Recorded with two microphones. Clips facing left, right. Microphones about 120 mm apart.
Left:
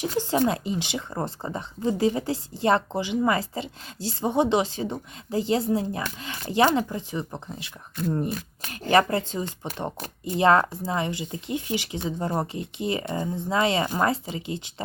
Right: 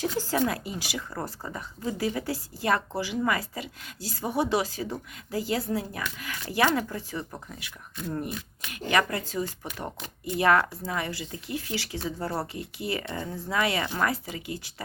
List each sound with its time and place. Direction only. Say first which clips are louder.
0.0 s speech: left 3 dB; 20° left (ahead or behind)